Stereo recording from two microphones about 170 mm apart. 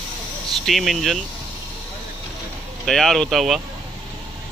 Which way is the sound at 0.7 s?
Centre (ahead or behind).